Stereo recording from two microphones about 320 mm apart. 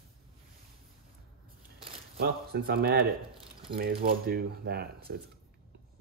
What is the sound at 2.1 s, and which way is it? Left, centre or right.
Speech, right.